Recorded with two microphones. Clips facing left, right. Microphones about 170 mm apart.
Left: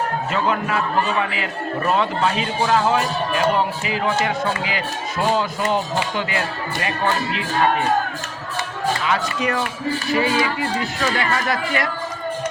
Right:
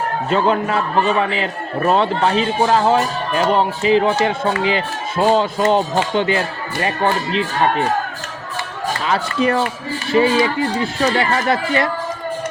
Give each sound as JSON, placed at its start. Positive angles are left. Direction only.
{"t": 0.3, "sound": "a man's voice", "side_deg": -30}
{"t": 9.0, "sound": "a man's voice", "side_deg": -30}